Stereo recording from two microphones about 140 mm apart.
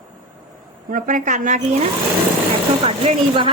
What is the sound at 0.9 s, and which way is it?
Speech, 70° right (ahead or behind).